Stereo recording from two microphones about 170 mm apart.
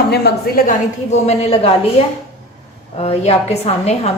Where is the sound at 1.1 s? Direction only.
40° left (ahead or behind).